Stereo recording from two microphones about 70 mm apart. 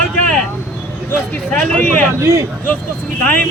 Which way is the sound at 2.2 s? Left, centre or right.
Right.